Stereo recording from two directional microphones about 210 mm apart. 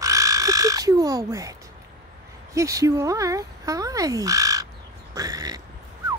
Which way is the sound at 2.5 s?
15° right (ahead or behind).